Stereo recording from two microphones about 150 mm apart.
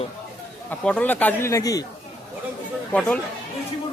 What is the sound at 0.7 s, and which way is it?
Speech, 10° left (ahead or behind).